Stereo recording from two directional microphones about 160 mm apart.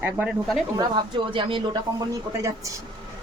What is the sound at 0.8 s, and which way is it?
Speech, 30° right (ahead or behind).